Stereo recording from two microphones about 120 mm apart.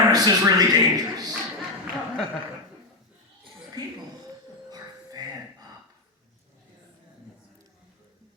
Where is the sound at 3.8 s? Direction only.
35° right (ahead or behind).